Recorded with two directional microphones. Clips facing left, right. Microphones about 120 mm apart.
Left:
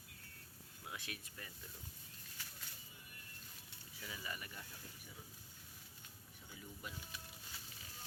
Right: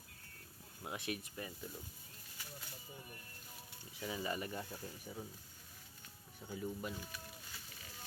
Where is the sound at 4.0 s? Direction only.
30° right (ahead or behind).